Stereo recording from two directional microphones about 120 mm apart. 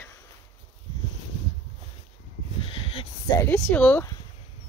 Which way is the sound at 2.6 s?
50° left (ahead or behind).